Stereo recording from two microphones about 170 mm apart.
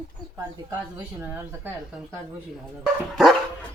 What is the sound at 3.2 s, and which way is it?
Dog, centre (ahead or behind).